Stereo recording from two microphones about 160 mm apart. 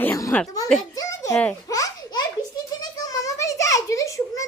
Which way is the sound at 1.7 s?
20° left (ahead or behind).